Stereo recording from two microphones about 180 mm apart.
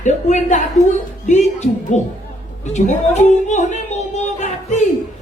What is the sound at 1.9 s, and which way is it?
Speech, 40° left (ahead or behind).